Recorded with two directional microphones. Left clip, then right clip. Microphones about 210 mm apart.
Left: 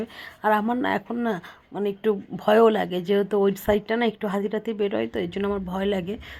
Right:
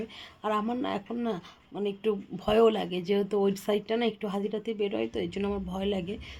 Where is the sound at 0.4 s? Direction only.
20° left (ahead or behind).